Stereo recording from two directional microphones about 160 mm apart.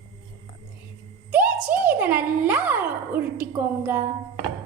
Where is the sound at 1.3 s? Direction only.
10° right (ahead or behind).